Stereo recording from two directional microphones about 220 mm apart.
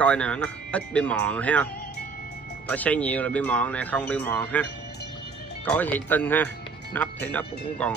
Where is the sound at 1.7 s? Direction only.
45° left (ahead or behind).